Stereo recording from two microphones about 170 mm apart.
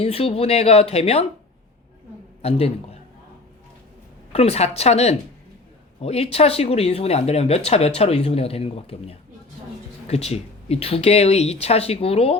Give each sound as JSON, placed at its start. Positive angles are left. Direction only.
{"t": 0.0, "sound": "speech", "side_deg": 35}
{"t": 2.4, "sound": "a man's voice", "side_deg": 35}
{"t": 4.3, "sound": "speech", "side_deg": 40}